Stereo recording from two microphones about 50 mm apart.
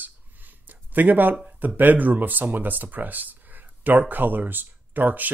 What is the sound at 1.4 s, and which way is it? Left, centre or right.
Speech, right.